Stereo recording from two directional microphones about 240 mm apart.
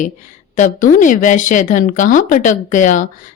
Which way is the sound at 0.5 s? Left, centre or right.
Left.